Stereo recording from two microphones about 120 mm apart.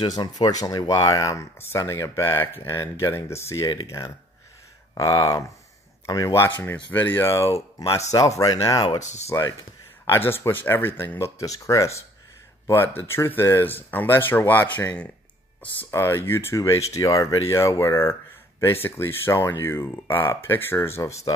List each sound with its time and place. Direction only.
0.2 s speech: 35° left (ahead or behind)
9.0 s speech: 75° left (ahead or behind)
10.0 s speech: 20° left (ahead or behind)